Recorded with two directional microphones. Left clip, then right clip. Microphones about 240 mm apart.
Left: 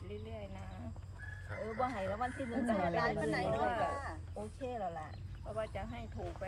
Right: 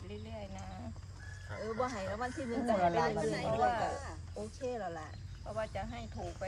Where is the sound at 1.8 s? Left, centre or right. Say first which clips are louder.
Left 1 dB; right.